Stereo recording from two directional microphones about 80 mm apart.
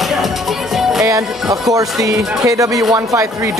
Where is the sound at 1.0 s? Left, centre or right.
Right.